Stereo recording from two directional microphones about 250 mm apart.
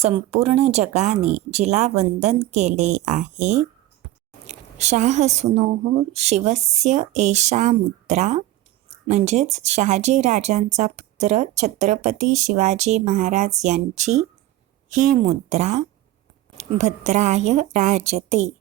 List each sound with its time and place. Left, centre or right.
0.0 s speech: right